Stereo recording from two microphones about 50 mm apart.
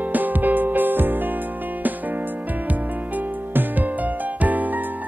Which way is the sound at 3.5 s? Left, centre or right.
Right.